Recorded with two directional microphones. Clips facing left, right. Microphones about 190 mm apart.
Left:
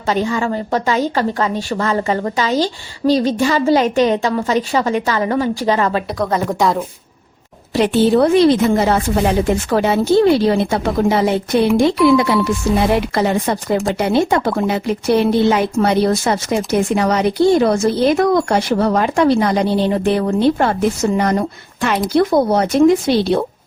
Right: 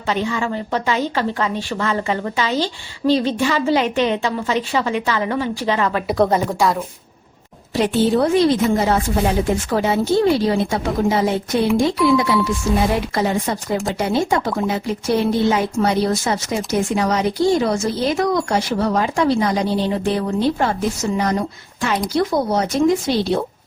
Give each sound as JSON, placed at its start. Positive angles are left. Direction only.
{"t": 0.1, "sound": "a woman's voice", "side_deg": 40}
{"t": 7.8, "sound": "speech", "side_deg": 70}